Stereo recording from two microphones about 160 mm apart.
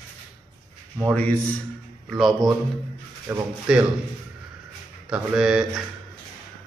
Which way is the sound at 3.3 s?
20° right (ahead or behind).